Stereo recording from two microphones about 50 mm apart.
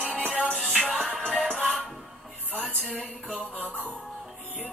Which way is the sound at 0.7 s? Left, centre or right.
Centre.